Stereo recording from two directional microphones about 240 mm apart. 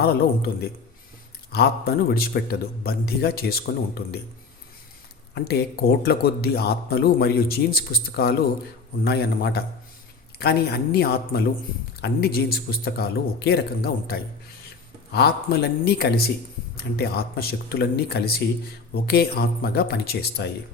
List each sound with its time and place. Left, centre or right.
0.0 s speech: left
5.3 s speech: left